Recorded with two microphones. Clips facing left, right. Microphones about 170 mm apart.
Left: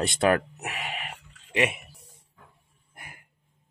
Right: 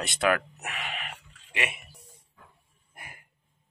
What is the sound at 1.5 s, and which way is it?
Speech, 40° left (ahead or behind).